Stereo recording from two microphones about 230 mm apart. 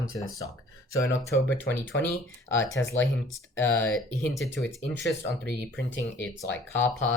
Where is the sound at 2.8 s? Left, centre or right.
Left.